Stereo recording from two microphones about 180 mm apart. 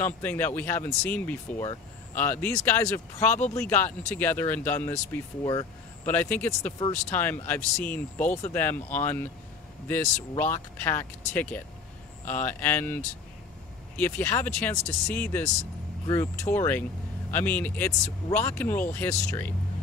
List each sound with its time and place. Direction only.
0.0 s speech: 10° left (ahead or behind)
5.4 s speech: 20° left (ahead or behind)
6.0 s speech: 10° left (ahead or behind)